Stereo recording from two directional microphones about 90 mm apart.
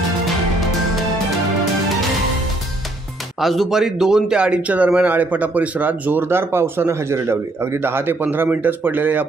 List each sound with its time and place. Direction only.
3.3 s a man's voice: centre (ahead or behind); by 9.2 s 20° right (ahead or behind)